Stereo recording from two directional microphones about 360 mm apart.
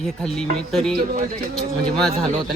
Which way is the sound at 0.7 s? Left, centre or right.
Centre.